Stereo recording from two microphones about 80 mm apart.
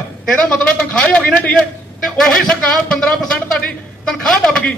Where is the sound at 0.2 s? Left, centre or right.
Centre.